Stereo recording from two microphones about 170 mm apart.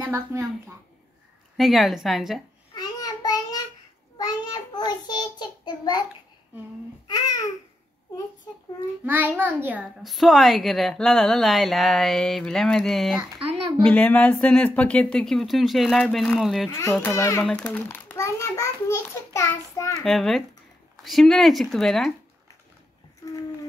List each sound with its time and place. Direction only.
0.0 s speech: 15° right (ahead or behind)
1.6 s a child's voice: centre (ahead or behind)
2.7 s child singing: 25° left (ahead or behind)
7.1 s babbling: 20° left (ahead or behind)
9.0 s a child's voice: 10° right (ahead or behind)
16.7 s a child's voice: 15° left (ahead or behind)
20.1 s a child's voice: centre (ahead or behind)